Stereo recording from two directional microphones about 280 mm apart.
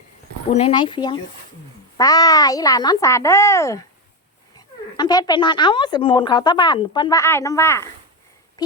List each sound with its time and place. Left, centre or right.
0.5 s speech: centre